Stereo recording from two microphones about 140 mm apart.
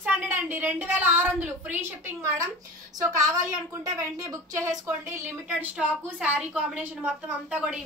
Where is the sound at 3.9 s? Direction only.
25° right (ahead or behind).